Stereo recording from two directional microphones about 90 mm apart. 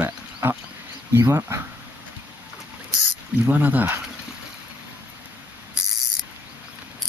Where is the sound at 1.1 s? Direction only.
30° right (ahead or behind).